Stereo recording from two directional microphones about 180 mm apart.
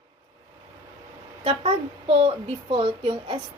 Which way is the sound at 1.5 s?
35° right (ahead or behind).